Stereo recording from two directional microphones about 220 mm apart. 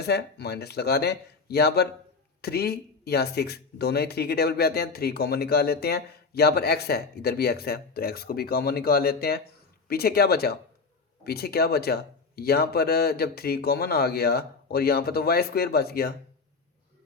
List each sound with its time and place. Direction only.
0.0 s speech: 50° left (ahead or behind)